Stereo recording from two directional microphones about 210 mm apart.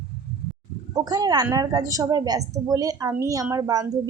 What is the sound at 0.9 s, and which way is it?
A woman's voice, 20° right (ahead or behind).